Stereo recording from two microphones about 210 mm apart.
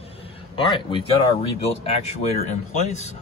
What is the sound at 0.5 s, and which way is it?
Speech, 25° left (ahead or behind).